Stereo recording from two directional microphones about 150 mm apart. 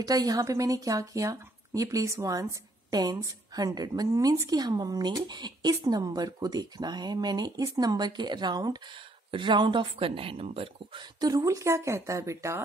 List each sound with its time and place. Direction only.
0.0 s a woman's voice: 25° right (ahead or behind)